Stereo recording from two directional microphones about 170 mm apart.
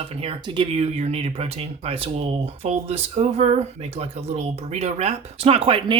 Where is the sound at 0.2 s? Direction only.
30° right (ahead or behind).